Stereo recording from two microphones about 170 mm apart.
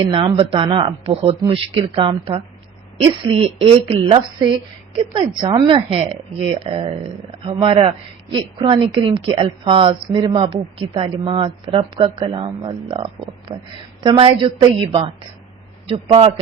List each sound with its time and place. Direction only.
0.0 s a woman's voice: 30° right (ahead or behind)